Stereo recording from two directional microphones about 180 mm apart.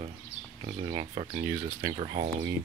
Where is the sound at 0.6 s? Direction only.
30° right (ahead or behind).